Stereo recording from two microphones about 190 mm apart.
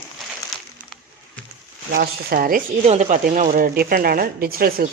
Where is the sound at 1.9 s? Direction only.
50° right (ahead or behind).